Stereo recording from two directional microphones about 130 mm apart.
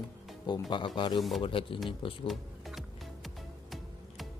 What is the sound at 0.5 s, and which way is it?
Speech, 35° left (ahead or behind).